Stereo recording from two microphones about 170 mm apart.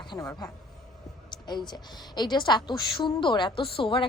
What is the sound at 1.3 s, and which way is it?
A woman's voice, 25° left (ahead or behind).